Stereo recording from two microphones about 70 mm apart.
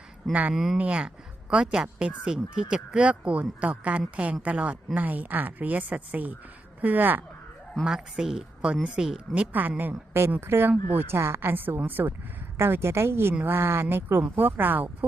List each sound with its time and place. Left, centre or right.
0.5 s speech: centre
0.8 s speech: centre
7.9 s a woman's voice: centre; by 11.3 s right
11.3 s a woman's voice: right